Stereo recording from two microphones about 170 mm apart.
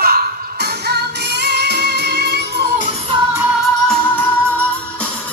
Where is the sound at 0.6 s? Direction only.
75° right (ahead or behind).